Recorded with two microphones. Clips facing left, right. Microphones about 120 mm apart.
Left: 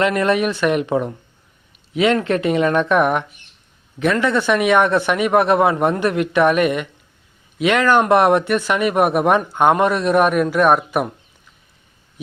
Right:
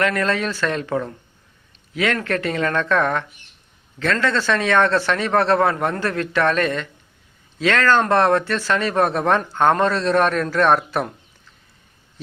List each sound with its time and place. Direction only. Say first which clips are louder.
0.0 s speech: left 4 dB; 20° left (ahead or behind)